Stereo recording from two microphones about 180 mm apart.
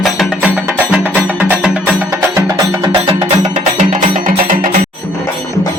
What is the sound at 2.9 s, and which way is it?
Music, 30° right (ahead or behind).